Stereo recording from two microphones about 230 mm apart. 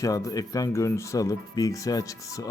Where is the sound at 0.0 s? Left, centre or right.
Centre.